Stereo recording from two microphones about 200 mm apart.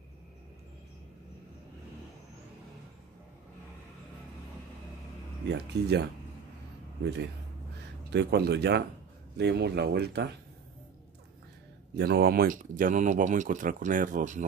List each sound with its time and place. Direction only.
5.5 s speech: 55° right (ahead or behind)
8.1 s speech: 60° right (ahead or behind)
11.9 s speech: 55° right (ahead or behind)